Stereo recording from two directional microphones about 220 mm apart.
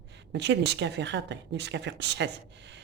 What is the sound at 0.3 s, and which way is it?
Speech, 50° right (ahead or behind).